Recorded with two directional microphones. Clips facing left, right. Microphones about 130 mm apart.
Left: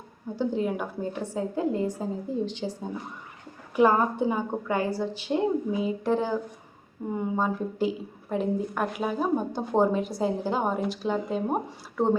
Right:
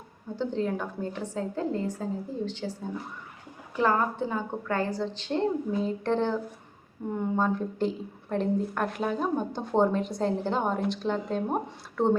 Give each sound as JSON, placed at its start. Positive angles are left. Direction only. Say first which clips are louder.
{"t": 0.3, "sound": "a woman's voice", "louder": "left 2 dB", "side_deg": 10}